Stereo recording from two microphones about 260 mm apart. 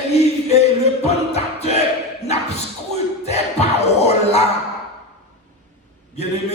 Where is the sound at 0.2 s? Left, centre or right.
Left.